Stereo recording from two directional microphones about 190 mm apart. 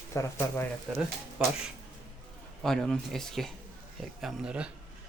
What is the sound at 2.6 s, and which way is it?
Speech, centre (ahead or behind).